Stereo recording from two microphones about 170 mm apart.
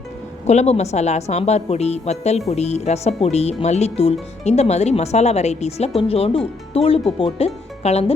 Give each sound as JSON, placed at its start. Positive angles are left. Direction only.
{"t": 0.4, "sound": "speech", "side_deg": 40}